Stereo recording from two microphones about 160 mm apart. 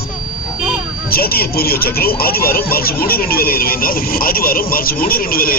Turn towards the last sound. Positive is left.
turn(degrees=65)  # may be behind; listen again after turning